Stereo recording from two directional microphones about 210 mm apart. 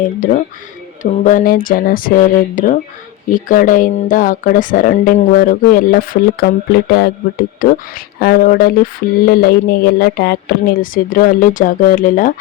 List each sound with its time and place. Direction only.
0.0 s speech: 40° left (ahead or behind)